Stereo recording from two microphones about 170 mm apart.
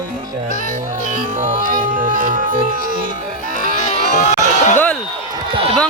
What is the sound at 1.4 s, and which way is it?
Music, 50° right (ahead or behind).